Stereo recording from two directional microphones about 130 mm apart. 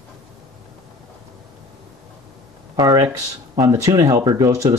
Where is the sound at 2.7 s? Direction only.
30° right (ahead or behind).